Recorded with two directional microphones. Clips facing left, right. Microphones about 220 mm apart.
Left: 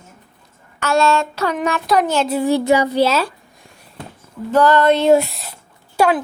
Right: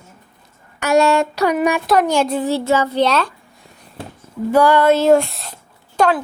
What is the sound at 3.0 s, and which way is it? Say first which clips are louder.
Female singing: even; 5° left (ahead or behind).